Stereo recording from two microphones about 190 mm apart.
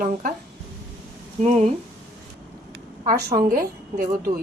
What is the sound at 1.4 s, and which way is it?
Speech, 35° right (ahead or behind).